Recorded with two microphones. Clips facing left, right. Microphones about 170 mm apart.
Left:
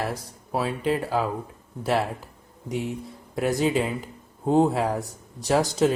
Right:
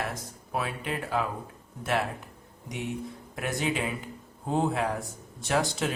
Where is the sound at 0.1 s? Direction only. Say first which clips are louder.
Left 4 dB; 30° left (ahead or behind).